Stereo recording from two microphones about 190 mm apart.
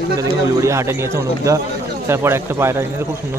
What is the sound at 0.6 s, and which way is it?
Speech, 15° right (ahead or behind).